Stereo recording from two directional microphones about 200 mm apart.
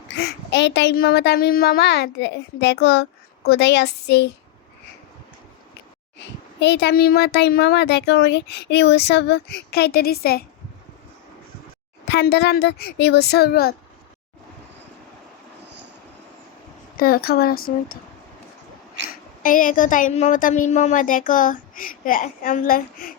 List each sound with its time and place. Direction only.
0.2 s a child's voice: 55° left (ahead or behind)
6.1 s a child's voice: 60° left (ahead or behind)
12.0 s speech: 55° left (ahead or behind)
17.0 s speech: 50° left (ahead or behind)
19.4 s a woman's voice: 45° left (ahead or behind)